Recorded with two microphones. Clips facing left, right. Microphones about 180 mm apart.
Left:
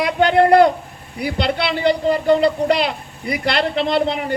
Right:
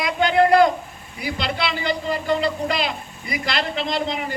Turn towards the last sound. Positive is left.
turn(degrees=60)  # may be behind; listen again after turning